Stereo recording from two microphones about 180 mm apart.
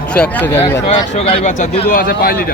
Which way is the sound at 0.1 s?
10° left (ahead or behind).